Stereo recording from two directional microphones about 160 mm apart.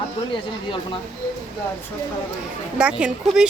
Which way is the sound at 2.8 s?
5° right (ahead or behind).